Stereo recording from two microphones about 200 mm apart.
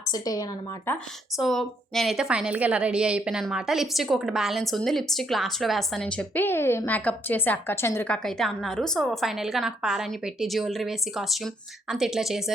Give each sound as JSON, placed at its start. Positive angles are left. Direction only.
{"t": 0.1, "sound": "a woman's voice", "side_deg": 20}